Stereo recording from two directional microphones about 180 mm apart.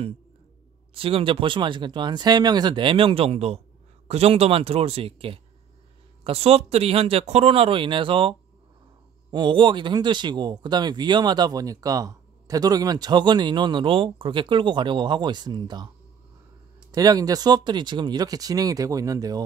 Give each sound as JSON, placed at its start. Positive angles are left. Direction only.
{"t": 0.9, "sound": "speech", "side_deg": -30}
{"t": 16.9, "sound": "speech", "side_deg": -20}